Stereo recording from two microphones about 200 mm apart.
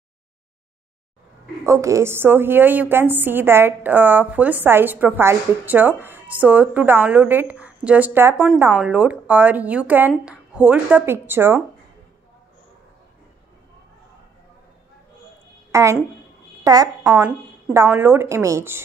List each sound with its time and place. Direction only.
1.6 s a woman's voice: 15° right (ahead or behind)
15.7 s a woman's voice: 15° right (ahead or behind)